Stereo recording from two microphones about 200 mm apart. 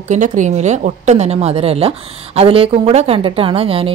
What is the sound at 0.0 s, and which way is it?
A woman's voice, 40° right (ahead or behind).